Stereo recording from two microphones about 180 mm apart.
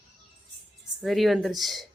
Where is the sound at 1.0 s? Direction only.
Centre (ahead or behind).